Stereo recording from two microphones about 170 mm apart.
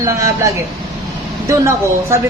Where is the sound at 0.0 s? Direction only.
20° right (ahead or behind).